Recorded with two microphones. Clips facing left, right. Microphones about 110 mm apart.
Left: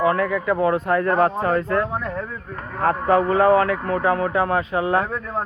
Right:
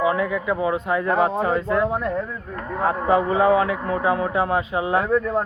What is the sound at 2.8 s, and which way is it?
A man's voice, 15° right (ahead or behind).